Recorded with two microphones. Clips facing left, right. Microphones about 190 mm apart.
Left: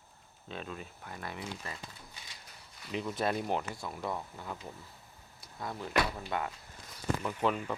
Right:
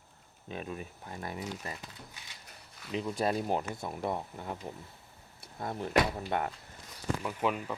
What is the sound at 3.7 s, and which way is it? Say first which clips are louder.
Speech: right 3 dB; 20° right (ahead or behind).